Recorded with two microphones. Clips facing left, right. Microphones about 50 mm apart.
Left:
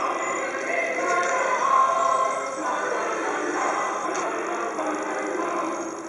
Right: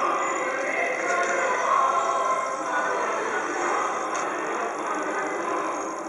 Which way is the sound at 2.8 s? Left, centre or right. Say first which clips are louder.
Right 1 dB; right.